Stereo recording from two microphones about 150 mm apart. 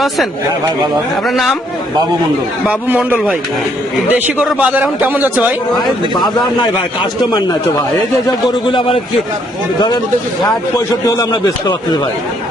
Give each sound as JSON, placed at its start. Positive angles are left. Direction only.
{"t": 1.3, "sound": "a man's voice", "side_deg": 0}
{"t": 2.6, "sound": "a man's voice", "side_deg": -10}
{"t": 4.4, "sound": "a man's voice", "side_deg": -10}
{"t": 6.1, "sound": "a man's voice", "side_deg": 30}
{"t": 10.8, "sound": "a man's voice", "side_deg": 25}